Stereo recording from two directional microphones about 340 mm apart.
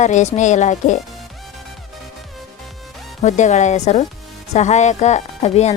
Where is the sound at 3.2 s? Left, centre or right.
Left.